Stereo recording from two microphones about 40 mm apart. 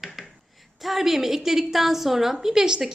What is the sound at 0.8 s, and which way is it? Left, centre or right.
A woman's voice, centre.